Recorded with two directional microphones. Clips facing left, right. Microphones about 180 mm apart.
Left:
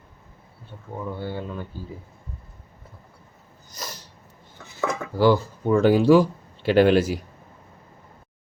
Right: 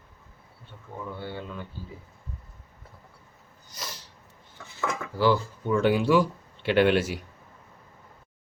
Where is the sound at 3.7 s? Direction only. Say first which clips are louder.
Left 3 dB; 40° left (ahead or behind).